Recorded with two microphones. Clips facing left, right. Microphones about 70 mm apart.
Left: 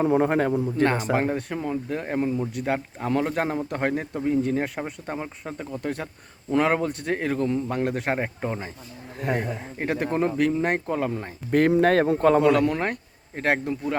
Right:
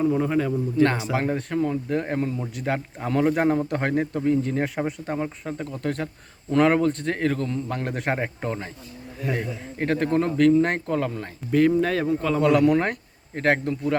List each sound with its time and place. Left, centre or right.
0.0 s a man's voice: left
1.2 s speech: centre
1.5 s a man's voice: centre
1.9 s a man's voice: centre
7.7 s speech: centre
8.4 s a man's voice: centre
9.2 s speech: left
9.7 s a man's voice: centre
11.7 s a man's voice: left
12.4 s speech: centre